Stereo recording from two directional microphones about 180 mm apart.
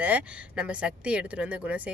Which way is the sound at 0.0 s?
5° right (ahead or behind).